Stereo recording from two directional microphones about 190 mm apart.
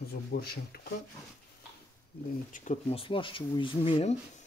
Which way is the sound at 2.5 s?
40° left (ahead or behind).